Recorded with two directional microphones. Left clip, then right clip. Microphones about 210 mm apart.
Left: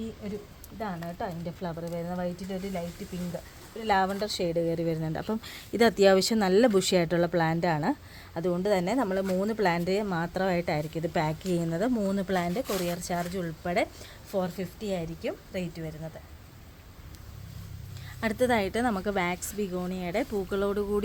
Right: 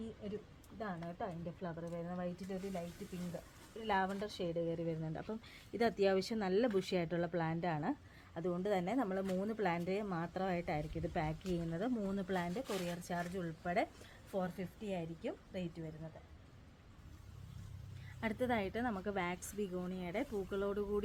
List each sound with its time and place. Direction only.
0.8 s speech: 30° left (ahead or behind)
18.2 s speech: 35° left (ahead or behind)